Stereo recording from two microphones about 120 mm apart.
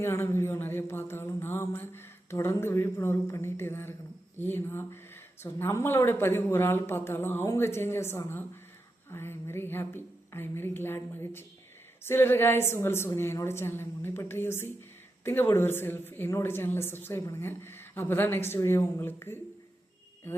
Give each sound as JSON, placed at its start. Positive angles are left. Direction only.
{"t": 0.0, "sound": "a woman's voice", "side_deg": 20}